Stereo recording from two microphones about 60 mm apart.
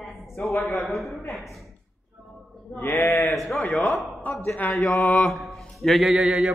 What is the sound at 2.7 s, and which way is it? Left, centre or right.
Speech, left.